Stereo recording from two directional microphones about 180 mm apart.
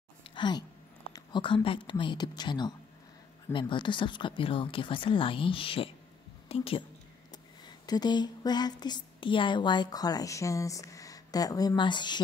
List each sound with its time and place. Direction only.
0.3 s a woman's voice: 25° left (ahead or behind)